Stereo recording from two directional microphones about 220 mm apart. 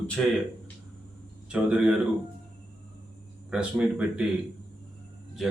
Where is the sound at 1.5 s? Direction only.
5° right (ahead or behind).